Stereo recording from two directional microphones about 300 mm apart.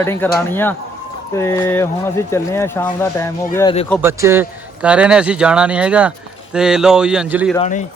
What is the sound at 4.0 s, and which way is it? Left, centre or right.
A man's voice, centre.